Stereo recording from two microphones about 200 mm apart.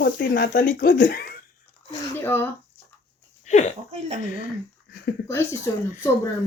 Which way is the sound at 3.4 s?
35° left (ahead or behind).